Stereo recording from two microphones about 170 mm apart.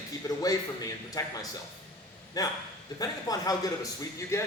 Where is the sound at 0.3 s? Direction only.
20° left (ahead or behind).